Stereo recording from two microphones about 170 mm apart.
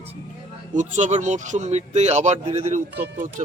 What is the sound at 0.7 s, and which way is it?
Speech, 45° right (ahead or behind).